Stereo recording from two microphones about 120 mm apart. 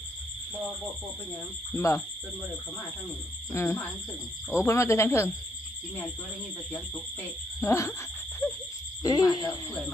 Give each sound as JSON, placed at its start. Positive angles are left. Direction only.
{"t": 1.7, "sound": "speech", "side_deg": 25}
{"t": 3.5, "sound": "speech", "side_deg": 20}
{"t": 7.6, "sound": "speech", "side_deg": 25}
{"t": 9.0, "sound": "speech", "side_deg": 35}